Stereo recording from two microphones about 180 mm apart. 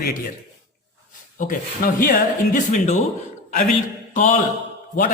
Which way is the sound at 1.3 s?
50° left (ahead or behind).